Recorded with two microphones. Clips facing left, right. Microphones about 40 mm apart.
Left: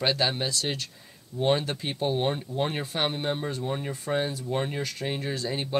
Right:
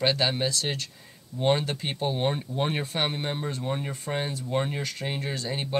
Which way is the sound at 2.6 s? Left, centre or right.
Centre.